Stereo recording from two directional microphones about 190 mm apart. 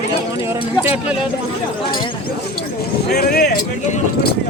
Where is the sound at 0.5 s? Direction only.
15° right (ahead or behind).